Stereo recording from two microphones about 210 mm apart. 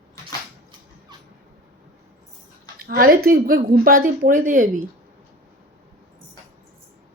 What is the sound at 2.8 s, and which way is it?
A woman's voice, 45° right (ahead or behind).